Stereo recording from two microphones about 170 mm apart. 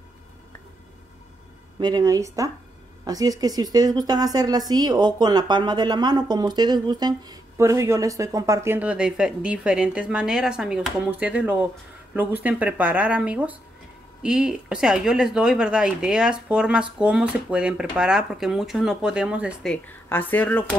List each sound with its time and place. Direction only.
1.8 s a woman's voice: 25° right (ahead or behind); by 19.7 s 5° right (ahead or behind)
19.7 s speech: 10° left (ahead or behind)